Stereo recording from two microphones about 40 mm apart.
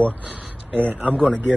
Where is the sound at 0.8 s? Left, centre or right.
Right.